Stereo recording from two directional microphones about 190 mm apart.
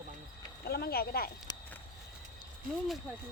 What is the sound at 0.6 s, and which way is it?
Speech, 55° left (ahead or behind).